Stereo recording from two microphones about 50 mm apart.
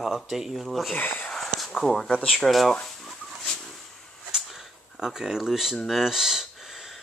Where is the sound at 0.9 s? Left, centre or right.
Left.